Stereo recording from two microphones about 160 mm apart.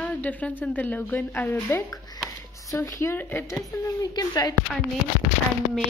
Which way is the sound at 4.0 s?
25° left (ahead or behind).